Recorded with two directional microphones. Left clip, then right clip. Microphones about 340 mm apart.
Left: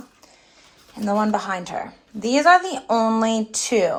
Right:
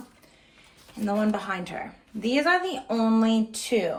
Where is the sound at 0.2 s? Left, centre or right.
Centre.